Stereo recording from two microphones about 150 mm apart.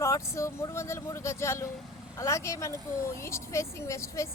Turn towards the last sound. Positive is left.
turn(degrees=20)  # may be behind; listen again after turning